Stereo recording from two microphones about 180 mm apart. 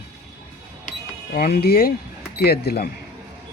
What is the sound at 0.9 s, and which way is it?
Cash register, 55° left (ahead or behind).